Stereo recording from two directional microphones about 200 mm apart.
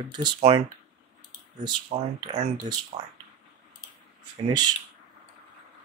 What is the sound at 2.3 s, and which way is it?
Speech, 35° right (ahead or behind).